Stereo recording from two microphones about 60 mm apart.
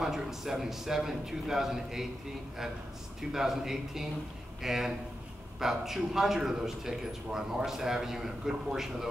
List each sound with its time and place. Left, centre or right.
0.0 s a man's voice: centre
3.2 s a man's voice: centre